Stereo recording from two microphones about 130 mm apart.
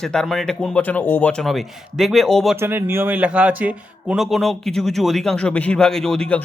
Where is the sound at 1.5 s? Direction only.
Centre (ahead or behind).